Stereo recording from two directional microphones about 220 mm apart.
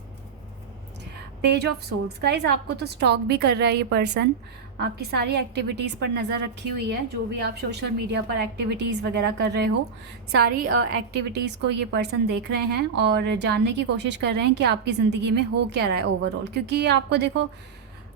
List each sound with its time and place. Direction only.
1.4 s a woman's voice: 50° right (ahead or behind)